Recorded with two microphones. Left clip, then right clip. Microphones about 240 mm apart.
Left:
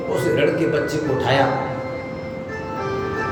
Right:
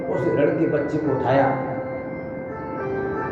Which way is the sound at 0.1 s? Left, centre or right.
Centre.